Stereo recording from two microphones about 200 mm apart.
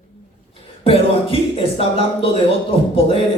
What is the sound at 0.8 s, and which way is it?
Speech, 25° left (ahead or behind).